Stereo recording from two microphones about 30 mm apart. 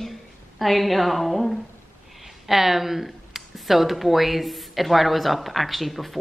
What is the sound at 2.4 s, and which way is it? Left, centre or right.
Speech, centre.